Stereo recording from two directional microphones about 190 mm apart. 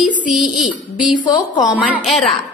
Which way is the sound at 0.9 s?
5° right (ahead or behind).